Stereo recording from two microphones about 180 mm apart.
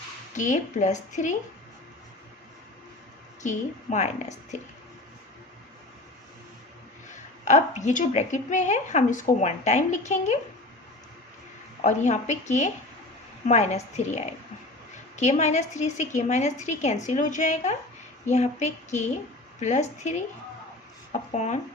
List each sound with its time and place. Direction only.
0.3 s a woman's voice: 45° left (ahead or behind)
3.4 s a woman's voice: 40° left (ahead or behind)
7.4 s a woman's voice: 40° left (ahead or behind)
11.8 s a woman's voice: 40° left (ahead or behind)